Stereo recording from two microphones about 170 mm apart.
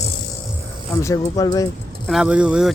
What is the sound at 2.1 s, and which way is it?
Speech, 5° right (ahead or behind).